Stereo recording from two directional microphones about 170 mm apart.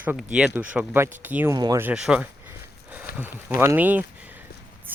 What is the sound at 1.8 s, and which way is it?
Speech, 5° right (ahead or behind).